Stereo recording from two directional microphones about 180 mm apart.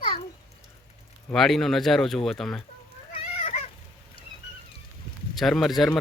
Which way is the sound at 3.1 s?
35° left (ahead or behind).